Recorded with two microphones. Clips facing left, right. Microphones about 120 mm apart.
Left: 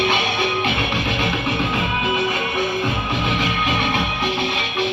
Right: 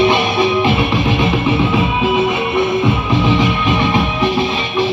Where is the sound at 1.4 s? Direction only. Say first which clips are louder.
Right 7 dB; 55° right (ahead or behind).